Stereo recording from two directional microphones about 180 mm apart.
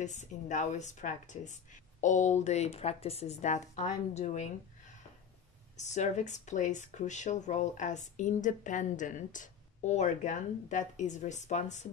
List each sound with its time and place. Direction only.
0.0 s a woman's voice: 40° left (ahead or behind)
5.8 s speech: 40° left (ahead or behind)